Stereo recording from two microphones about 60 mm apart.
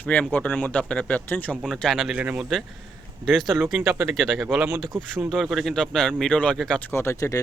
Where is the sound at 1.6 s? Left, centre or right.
Centre.